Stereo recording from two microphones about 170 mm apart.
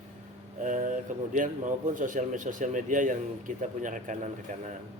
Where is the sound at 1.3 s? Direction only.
50° right (ahead or behind).